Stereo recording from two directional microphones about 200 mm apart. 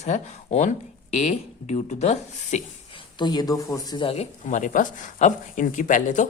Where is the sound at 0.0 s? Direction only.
35° left (ahead or behind).